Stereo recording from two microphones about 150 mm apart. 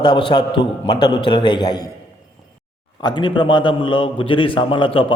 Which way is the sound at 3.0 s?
30° left (ahead or behind).